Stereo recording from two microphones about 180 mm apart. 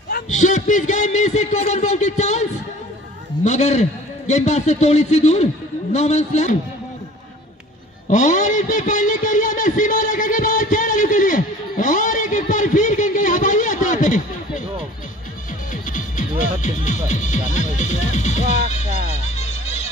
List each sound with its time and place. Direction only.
0.1 s a man's voice: 45° left (ahead or behind)
3.4 s a man's voice: 40° left (ahead or behind)
8.1 s a man's voice: 45° left (ahead or behind)
15.7 s speech: 45° left (ahead or behind)
19.3 s music: 40° left (ahead or behind)